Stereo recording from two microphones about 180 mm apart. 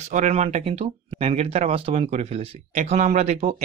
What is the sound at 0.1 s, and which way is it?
Speech, 40° right (ahead or behind).